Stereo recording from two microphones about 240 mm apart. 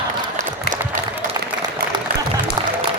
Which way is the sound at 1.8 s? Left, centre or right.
Right.